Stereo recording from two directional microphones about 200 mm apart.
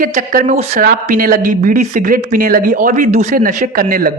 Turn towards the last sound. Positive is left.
turn(degrees=-45)  # may be behind; listen again after turning